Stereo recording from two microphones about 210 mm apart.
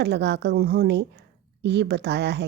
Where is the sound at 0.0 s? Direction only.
55° right (ahead or behind).